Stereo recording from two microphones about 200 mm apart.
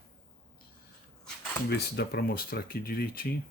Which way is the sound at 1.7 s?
55° left (ahead or behind).